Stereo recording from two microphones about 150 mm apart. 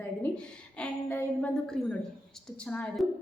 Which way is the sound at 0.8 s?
10° left (ahead or behind).